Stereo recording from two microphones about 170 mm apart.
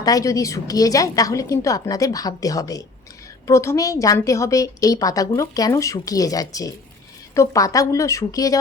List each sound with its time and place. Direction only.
0.0 s a woman's voice: 20° left (ahead or behind)